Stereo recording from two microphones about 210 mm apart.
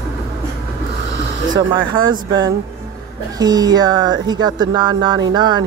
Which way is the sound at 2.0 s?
20° right (ahead or behind).